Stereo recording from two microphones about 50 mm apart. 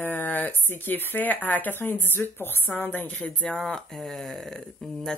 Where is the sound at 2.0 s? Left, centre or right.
Left.